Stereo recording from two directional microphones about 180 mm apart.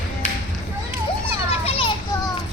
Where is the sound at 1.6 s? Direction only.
30° left (ahead or behind).